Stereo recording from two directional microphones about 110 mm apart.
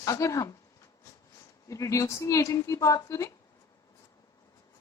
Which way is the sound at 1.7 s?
30° left (ahead or behind).